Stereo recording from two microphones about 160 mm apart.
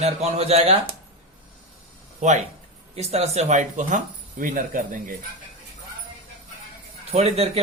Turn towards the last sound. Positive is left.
turn(degrees=-40)  # may be behind; listen again after turning